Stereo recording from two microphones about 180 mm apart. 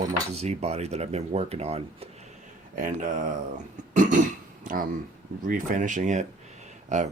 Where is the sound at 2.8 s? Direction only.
45° right (ahead or behind).